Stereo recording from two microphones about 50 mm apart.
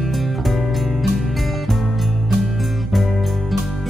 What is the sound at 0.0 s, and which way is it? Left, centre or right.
Music, centre.